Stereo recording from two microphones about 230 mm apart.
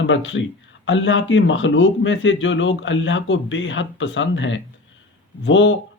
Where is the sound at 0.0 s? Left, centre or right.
Left.